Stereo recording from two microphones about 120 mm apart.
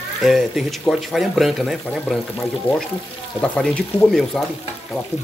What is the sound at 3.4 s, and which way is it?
Speech, 5° left (ahead or behind).